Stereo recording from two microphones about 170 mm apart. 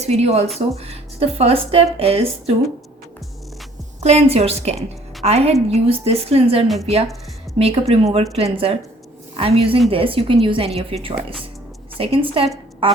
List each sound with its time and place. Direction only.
0.0 s speech: 40° right (ahead or behind)
0.4 s speech: centre (ahead or behind)
0.8 s speech: 35° right (ahead or behind)
4.0 s a woman's voice: 40° right (ahead or behind)